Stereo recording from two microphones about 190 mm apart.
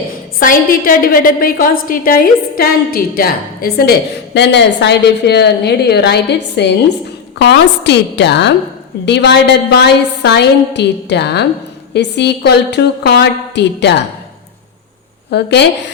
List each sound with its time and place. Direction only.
0.3 s a woman's voice: 50° left (ahead or behind)
4.4 s a woman's voice: 65° left (ahead or behind)
15.3 s a woman's voice: 65° left (ahead or behind)